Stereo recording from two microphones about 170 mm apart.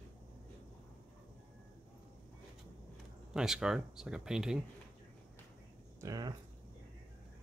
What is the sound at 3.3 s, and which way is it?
Speech, 5° right (ahead or behind).